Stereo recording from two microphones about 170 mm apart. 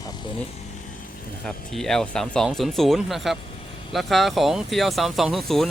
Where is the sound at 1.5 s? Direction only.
Centre (ahead or behind).